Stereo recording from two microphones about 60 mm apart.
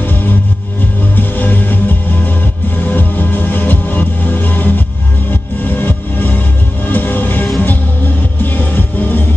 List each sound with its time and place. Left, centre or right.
1.1 s music: left